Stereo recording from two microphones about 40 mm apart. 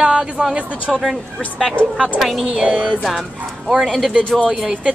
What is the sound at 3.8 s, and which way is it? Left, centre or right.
Speech, centre.